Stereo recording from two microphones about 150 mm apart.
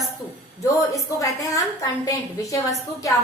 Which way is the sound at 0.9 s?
20° left (ahead or behind).